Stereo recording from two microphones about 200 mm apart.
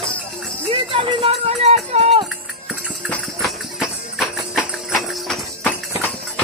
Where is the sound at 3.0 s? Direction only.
Centre (ahead or behind).